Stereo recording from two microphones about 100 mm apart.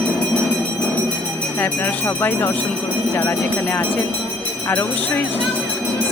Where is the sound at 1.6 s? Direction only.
20° left (ahead or behind).